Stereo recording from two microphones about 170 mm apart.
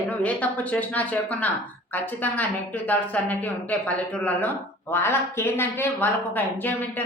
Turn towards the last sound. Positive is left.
turn(degrees=10)  # may be behind; listen again after turning